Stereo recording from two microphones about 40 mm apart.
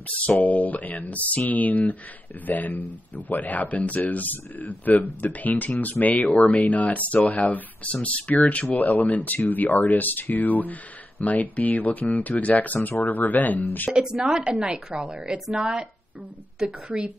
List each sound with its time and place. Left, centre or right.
0.4 s speech: left
13.9 s speech: centre
15.6 s speech: right